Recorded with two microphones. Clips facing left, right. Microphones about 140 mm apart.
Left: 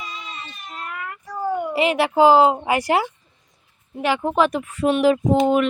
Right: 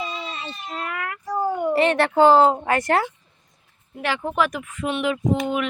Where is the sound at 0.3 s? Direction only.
90° right.